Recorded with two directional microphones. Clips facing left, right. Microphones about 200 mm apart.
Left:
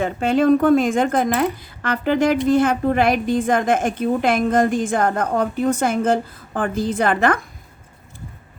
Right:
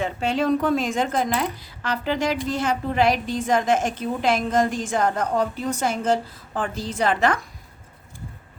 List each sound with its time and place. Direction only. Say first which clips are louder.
0.0 s a woman's voice: left 6 dB; 50° left (ahead or behind)